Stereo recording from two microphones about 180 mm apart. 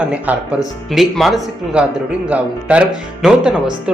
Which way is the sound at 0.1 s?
5° right (ahead or behind).